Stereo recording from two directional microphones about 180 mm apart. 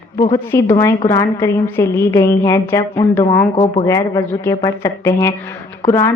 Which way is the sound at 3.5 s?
35° left (ahead or behind).